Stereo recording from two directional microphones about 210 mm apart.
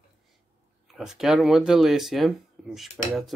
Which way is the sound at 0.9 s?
Centre (ahead or behind).